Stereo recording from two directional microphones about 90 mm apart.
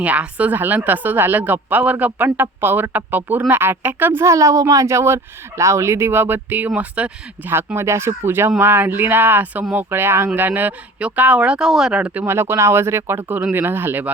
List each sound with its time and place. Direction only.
0.0 s speech: 15° right (ahead or behind)
7.5 s speech: 25° right (ahead or behind)
12.2 s speech: 30° right (ahead or behind)